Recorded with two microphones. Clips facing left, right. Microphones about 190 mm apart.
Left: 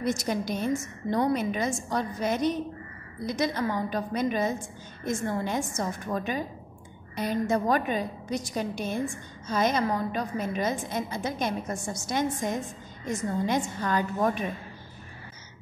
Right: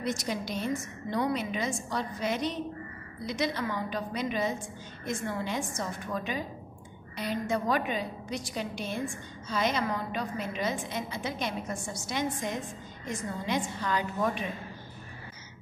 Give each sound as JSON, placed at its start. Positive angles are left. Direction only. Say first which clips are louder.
{"t": 0.0, "sound": "a woman's voice", "louder": "left 4 dB", "side_deg": 50}